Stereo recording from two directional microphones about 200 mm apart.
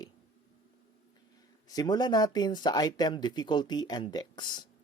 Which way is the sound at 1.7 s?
20° left (ahead or behind).